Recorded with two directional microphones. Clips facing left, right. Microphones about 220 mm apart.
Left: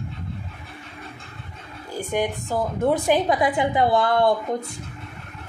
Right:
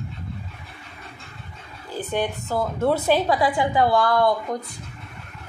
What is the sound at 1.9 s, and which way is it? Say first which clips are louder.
A woman's voice: left 1 dB; 15° left (ahead or behind).